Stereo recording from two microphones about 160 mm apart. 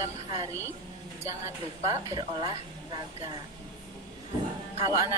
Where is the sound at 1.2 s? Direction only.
20° right (ahead or behind).